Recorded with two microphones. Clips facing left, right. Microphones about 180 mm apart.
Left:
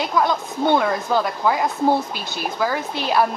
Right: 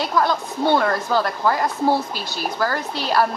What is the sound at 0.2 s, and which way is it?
Speech, 15° left (ahead or behind).